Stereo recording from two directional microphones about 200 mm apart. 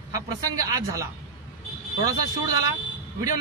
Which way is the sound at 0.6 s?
15° right (ahead or behind).